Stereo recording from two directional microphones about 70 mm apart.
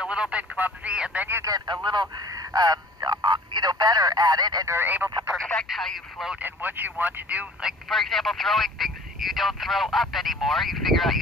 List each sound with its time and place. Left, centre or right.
0.0 s speech: centre
0.9 s speech: centre
1.4 s speech: right
4.8 s speech: right
5.7 s speech: centre
6.4 s speech: right
7.9 s speech: centre